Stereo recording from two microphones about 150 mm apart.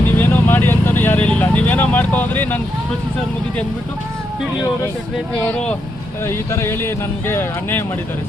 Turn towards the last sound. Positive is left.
turn(degrees=15)  # may be behind; listen again after turning